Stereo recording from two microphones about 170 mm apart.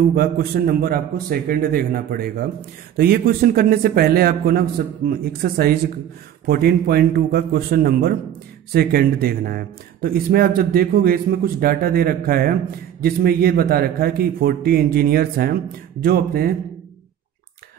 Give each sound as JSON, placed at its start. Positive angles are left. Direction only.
{"t": 0.1, "sound": "speech", "side_deg": -60}